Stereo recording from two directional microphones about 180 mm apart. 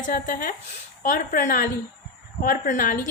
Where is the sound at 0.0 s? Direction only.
50° left (ahead or behind).